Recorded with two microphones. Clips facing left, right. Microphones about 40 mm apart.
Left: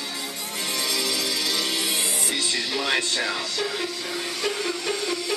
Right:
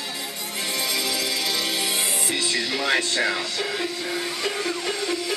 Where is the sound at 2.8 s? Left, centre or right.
Right.